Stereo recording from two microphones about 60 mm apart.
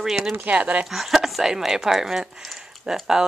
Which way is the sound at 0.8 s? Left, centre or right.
Centre.